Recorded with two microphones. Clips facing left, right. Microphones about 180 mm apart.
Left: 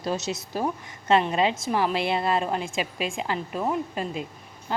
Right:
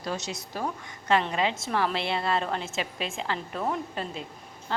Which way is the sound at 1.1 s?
20° left (ahead or behind).